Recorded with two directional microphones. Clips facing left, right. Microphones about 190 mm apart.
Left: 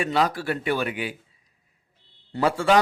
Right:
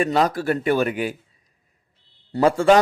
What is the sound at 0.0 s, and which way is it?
Speech, 45° right (ahead or behind).